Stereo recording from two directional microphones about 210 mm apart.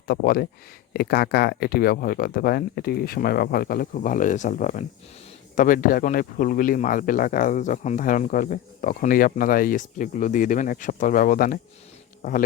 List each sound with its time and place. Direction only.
0.1 s speech: 45° left (ahead or behind)